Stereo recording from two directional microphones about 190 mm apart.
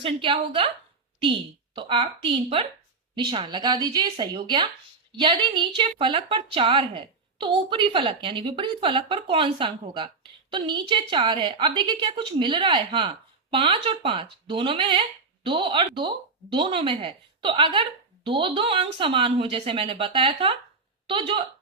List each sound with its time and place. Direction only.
0.0 s speech: 30° right (ahead or behind)